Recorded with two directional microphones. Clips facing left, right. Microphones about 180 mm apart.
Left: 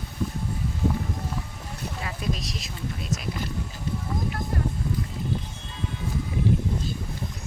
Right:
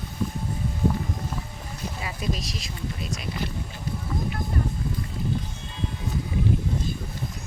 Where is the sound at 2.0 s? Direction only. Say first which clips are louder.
Even; centre (ahead or behind).